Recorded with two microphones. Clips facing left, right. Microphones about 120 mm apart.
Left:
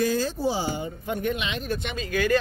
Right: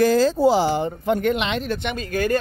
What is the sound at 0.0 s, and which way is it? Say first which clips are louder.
Speech: right 8 dB; 90° right.